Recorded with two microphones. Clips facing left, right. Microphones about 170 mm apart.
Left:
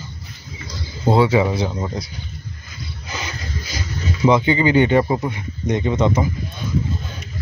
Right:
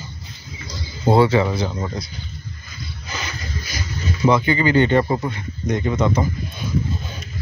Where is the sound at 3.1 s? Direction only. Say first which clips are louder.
Left 1 dB; 20° left (ahead or behind).